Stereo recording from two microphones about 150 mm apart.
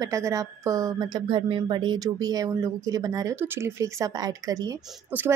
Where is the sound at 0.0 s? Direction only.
20° right (ahead or behind).